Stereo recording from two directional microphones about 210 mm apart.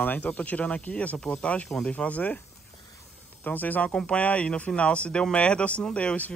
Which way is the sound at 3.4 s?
10° left (ahead or behind).